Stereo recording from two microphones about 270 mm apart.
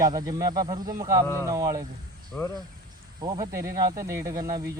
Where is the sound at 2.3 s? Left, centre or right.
Centre.